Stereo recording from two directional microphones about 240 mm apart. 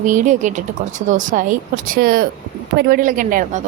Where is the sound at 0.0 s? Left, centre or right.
Right.